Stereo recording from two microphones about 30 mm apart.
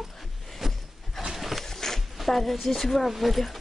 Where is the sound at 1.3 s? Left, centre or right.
Centre.